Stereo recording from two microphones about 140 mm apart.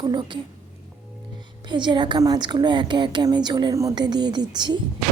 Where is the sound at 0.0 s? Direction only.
30° right (ahead or behind).